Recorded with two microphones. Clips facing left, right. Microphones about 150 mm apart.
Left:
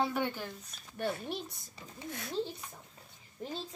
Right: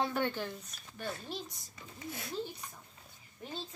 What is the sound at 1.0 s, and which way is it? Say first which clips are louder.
Speech: left 5 dB; 60° left (ahead or behind).